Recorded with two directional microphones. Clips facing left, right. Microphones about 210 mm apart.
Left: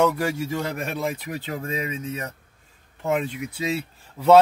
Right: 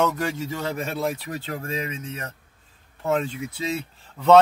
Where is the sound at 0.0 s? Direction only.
10° left (ahead or behind).